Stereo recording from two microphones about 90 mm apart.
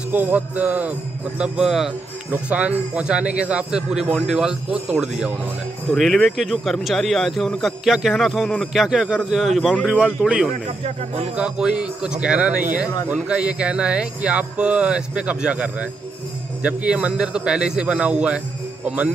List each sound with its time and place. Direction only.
0.1 s a man's voice: 15° right (ahead or behind)
1.4 s a man's voice: 5° right (ahead or behind)